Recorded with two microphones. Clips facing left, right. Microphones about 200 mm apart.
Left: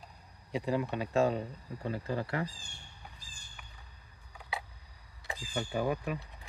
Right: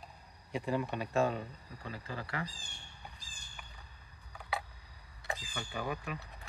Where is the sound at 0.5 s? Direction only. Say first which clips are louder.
Left 2 dB; 20° left (ahead or behind).